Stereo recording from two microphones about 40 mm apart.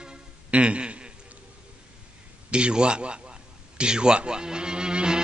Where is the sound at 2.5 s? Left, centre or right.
Right.